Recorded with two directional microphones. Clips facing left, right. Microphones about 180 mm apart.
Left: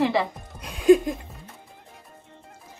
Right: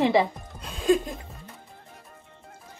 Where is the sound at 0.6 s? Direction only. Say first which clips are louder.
Left 6 dB; 15° left (ahead or behind).